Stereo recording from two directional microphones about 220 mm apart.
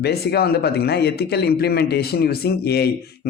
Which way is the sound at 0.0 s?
45° left (ahead or behind).